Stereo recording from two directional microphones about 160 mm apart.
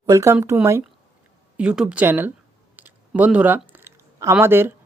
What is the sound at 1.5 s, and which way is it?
Speech, 5° right (ahead or behind).